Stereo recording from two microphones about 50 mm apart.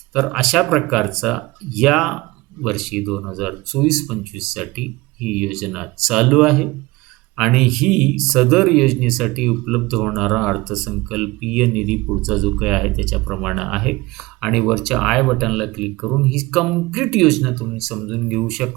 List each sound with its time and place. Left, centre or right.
0.1 s speech: centre